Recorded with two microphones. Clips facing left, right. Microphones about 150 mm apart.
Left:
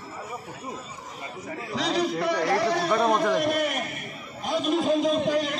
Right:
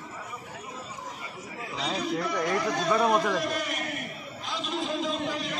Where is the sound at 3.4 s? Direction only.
55° left (ahead or behind).